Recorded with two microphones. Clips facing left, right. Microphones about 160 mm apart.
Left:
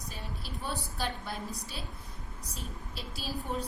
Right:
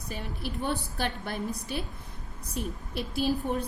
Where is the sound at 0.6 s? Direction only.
65° right (ahead or behind).